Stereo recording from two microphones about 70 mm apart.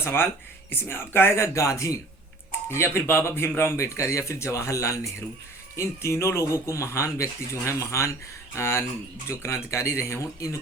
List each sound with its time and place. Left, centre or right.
0.0 s speech: left